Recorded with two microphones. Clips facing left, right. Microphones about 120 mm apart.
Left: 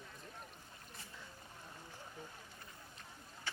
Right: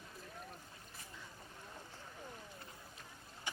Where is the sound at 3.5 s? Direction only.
15° right (ahead or behind).